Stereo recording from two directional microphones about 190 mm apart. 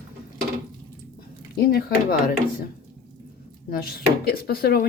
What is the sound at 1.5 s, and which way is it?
Speech, 55° left (ahead or behind).